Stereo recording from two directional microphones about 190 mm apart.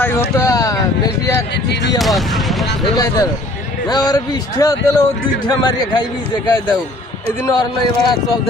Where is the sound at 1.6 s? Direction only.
60° left (ahead or behind).